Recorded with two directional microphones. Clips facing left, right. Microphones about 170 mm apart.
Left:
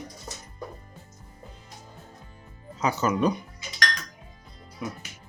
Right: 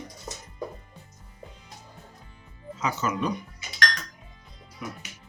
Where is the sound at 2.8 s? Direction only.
40° left (ahead or behind).